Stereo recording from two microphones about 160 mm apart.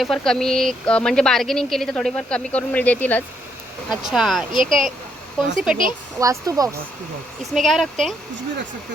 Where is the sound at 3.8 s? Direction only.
Centre (ahead or behind).